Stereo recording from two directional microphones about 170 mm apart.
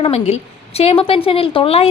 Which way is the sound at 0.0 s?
35° left (ahead or behind).